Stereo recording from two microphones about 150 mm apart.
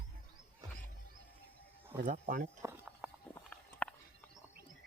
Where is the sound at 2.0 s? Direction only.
60° right (ahead or behind).